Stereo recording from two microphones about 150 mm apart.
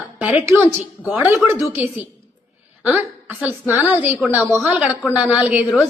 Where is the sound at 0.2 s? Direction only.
10° right (ahead or behind).